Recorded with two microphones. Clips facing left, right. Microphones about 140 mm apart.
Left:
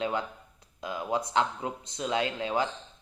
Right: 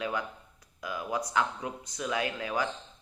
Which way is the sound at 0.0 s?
25° left (ahead or behind).